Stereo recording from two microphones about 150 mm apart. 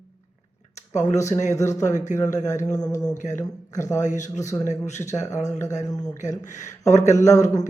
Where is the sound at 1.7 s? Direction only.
55° left (ahead or behind).